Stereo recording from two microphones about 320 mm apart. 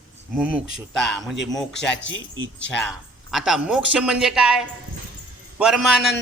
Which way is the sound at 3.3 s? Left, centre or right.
Centre.